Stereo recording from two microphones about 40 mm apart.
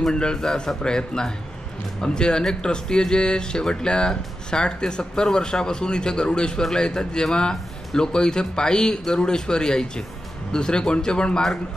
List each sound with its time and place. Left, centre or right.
0.1 s a man's voice: left